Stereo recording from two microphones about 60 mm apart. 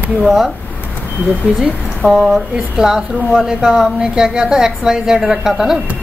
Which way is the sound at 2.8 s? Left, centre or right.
Centre.